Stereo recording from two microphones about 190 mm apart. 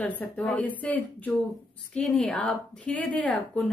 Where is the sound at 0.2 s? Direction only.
10° left (ahead or behind).